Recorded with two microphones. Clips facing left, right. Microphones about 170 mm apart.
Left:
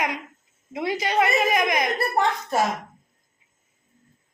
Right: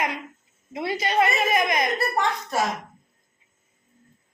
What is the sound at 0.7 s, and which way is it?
A woman's voice, 15° left (ahead or behind).